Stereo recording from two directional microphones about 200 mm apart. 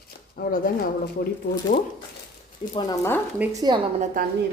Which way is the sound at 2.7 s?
20° left (ahead or behind).